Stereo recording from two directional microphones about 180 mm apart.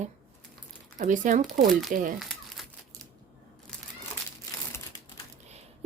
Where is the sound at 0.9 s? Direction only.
45° right (ahead or behind).